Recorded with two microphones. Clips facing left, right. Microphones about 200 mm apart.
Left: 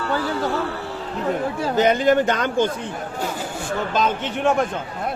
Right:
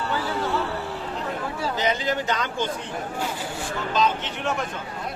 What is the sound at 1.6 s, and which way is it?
Speech, 50° left (ahead or behind).